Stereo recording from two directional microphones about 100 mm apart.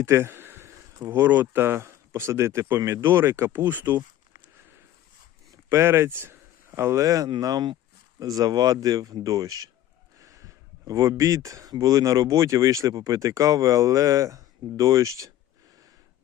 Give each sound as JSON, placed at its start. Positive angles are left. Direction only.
{"t": 0.0, "sound": "speech", "side_deg": -25}
{"t": 5.5, "sound": "speech", "side_deg": -25}